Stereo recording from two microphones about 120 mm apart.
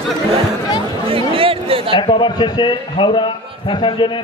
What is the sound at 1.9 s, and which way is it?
A man's voice, 40° left (ahead or behind).